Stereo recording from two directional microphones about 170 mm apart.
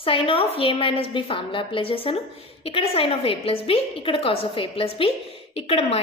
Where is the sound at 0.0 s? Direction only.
35° left (ahead or behind).